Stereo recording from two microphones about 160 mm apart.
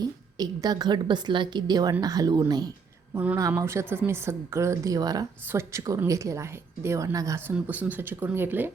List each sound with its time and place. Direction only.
0.0 s a woman's voice: 25° right (ahead or behind)
3.2 s speech: 10° right (ahead or behind)